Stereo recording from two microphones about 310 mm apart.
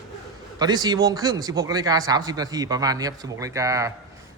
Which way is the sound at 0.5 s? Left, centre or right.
Centre.